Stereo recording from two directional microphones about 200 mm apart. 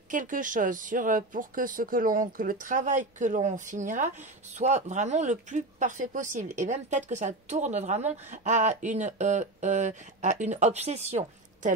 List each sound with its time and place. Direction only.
0.1 s speech: 40° right (ahead or behind)